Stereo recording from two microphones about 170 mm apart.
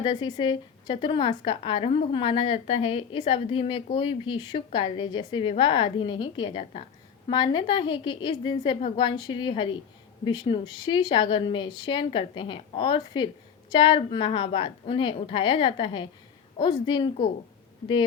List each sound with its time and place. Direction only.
0.0 s a woman's voice: 25° left (ahead or behind)